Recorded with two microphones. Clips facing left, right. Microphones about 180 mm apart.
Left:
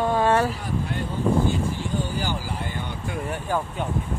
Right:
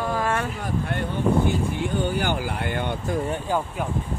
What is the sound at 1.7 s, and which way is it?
Speech, 60° right (ahead or behind).